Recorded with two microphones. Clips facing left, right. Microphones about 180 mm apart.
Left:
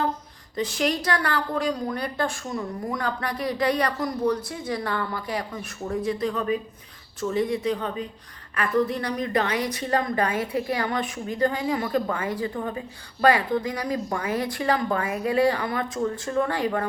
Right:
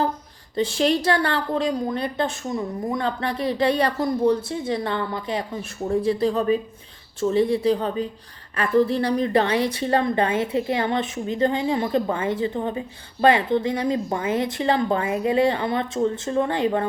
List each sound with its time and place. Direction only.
0.5 s a woman's voice: 30° right (ahead or behind)